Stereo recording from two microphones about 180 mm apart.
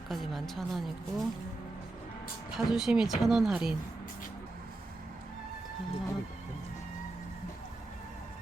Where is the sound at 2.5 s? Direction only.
5° right (ahead or behind).